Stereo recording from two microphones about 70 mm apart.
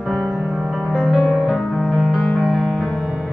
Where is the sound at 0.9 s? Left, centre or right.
Centre.